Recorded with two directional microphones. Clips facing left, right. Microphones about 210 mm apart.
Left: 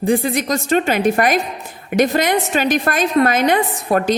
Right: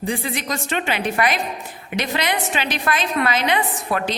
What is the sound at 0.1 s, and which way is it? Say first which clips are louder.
A woman's voice: left 9 dB; 45° left (ahead or behind).